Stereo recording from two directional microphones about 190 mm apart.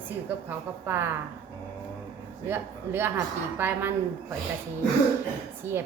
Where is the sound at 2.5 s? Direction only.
10° right (ahead or behind).